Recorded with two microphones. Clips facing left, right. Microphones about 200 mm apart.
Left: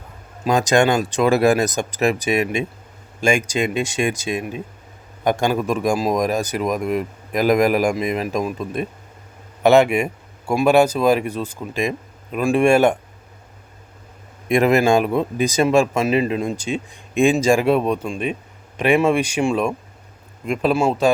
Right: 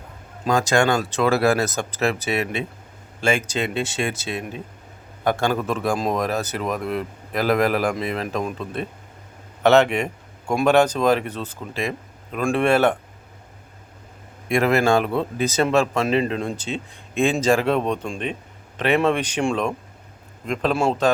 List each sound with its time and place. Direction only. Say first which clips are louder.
0.4 s a man's voice: left 3 dB; 15° left (ahead or behind)
14.4 s a man's voice: left 3 dB; 20° left (ahead or behind)